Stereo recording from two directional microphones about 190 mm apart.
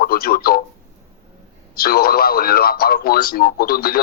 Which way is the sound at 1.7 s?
50° left (ahead or behind).